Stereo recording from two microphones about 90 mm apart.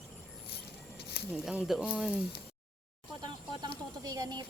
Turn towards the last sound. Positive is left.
turn(degrees=-45)  # may be behind; listen again after turning